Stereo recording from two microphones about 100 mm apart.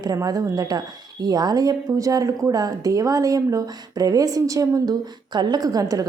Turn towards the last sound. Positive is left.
turn(degrees=-40)  # may be behind; listen again after turning